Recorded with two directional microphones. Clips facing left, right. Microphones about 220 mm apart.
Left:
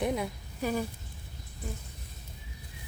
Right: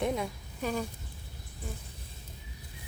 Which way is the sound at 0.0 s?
5° left (ahead or behind).